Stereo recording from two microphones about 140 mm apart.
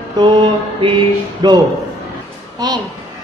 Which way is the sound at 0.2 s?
35° right (ahead or behind).